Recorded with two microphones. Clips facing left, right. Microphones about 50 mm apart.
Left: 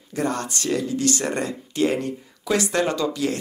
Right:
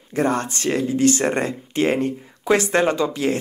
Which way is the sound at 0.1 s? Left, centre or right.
Right.